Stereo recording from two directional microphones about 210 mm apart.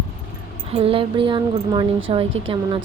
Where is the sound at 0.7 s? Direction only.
25° right (ahead or behind).